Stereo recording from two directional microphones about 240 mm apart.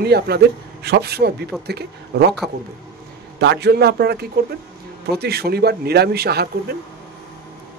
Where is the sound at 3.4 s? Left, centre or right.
Right.